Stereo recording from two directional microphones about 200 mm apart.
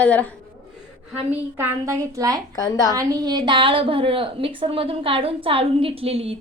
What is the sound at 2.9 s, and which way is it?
A woman's voice, 15° right (ahead or behind).